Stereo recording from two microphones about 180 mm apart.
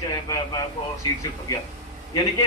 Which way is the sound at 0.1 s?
20° left (ahead or behind).